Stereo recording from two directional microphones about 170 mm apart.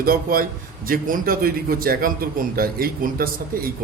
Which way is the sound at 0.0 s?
60° right (ahead or behind).